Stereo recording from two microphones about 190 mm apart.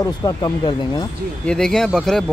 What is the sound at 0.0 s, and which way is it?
Speech, 20° left (ahead or behind).